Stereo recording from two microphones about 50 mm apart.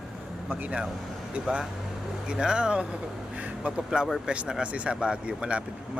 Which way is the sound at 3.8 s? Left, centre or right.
Centre.